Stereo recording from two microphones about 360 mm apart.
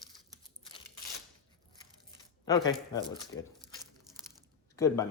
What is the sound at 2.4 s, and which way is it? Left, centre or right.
Speech, centre.